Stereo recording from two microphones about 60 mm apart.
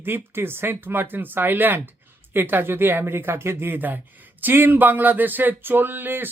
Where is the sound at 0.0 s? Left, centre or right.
Right.